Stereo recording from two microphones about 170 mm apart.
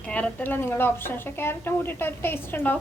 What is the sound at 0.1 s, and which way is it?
A woman's voice, 10° left (ahead or behind).